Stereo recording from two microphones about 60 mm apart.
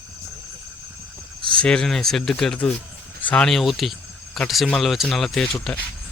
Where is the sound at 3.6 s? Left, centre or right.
Centre.